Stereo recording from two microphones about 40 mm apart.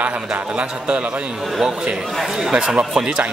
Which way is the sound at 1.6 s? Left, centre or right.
Centre.